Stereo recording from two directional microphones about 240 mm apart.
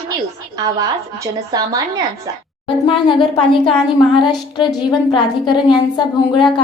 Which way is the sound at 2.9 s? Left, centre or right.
Left.